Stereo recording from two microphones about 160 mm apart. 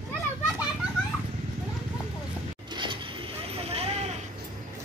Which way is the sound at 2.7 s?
30° right (ahead or behind).